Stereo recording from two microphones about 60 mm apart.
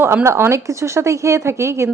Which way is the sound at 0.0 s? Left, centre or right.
Right.